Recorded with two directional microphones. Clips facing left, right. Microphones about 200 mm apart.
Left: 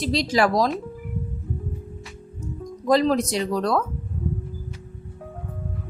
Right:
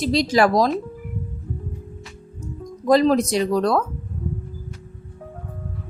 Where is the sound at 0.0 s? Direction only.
50° right (ahead or behind).